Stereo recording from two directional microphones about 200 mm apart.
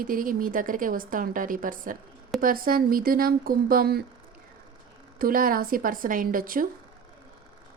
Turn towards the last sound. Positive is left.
turn(degrees=-45)  # may be behind; listen again after turning